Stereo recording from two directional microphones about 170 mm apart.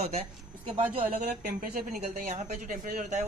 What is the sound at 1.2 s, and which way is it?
Speech, 55° right (ahead or behind).